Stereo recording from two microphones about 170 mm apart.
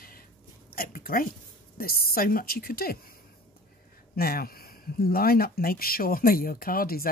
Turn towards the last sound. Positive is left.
turn(degrees=60)  # may be behind; listen again after turning